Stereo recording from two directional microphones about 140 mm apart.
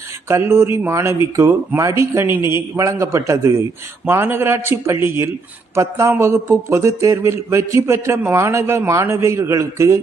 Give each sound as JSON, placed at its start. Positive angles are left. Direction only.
{"t": 0.3, "sound": "a man's voice", "side_deg": -20}